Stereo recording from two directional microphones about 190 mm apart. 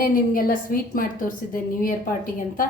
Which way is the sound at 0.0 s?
50° left (ahead or behind).